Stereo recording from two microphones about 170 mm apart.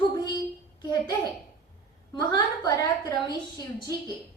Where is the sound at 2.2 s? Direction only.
25° left (ahead or behind).